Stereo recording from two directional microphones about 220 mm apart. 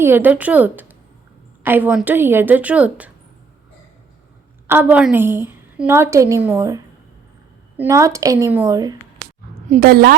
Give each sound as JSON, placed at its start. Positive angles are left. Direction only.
{"t": 0.0, "sound": "a woman's voice", "side_deg": -10}
{"t": 4.6, "sound": "a woman's voice", "side_deg": -10}
{"t": 9.6, "sound": "a woman's voice", "side_deg": -35}